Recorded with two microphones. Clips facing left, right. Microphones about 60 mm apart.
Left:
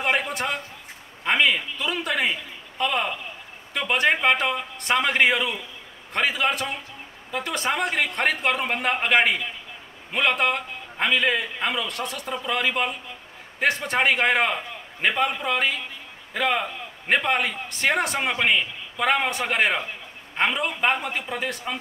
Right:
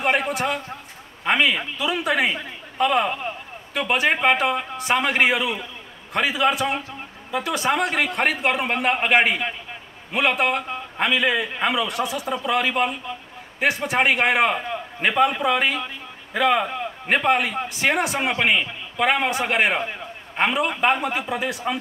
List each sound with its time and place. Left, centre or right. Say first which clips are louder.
0.3 s a man's voice: right 4 dB; centre
3.7 s a man's voice: right 1 dB; centre